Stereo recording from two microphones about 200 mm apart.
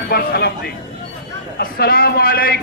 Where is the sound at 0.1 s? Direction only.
55° left (ahead or behind).